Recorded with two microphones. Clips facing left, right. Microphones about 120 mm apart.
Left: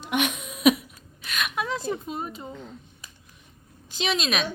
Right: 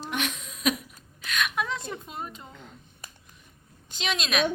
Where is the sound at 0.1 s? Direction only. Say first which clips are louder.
Left 7 dB; 10° left (ahead or behind).